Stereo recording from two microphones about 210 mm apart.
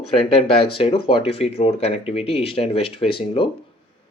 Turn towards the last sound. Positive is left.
turn(degrees=25)  # may be behind; listen again after turning